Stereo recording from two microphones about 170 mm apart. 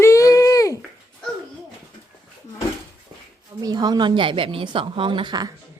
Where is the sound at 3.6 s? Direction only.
20° right (ahead or behind).